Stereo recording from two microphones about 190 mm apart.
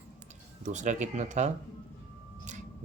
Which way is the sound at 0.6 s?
40° right (ahead or behind).